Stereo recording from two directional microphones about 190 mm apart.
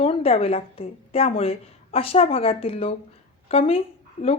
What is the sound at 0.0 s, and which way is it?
A woman's voice, 30° left (ahead or behind).